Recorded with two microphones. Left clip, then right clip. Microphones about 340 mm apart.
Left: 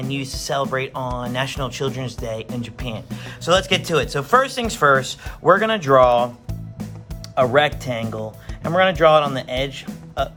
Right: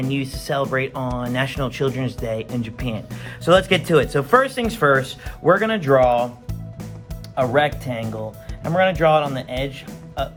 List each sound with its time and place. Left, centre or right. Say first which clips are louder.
0.0 s speech: right 1 dB; centre
7.3 s speech: left 2 dB; centre
8.7 s speech: left 2 dB; centre